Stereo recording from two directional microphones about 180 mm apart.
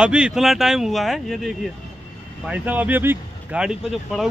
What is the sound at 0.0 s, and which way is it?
Speech, 5° right (ahead or behind).